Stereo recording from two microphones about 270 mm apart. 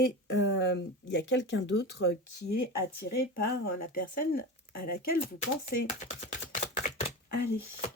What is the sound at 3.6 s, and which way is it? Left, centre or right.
Speech, left.